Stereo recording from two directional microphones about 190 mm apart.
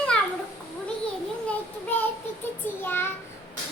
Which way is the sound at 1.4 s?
10° left (ahead or behind).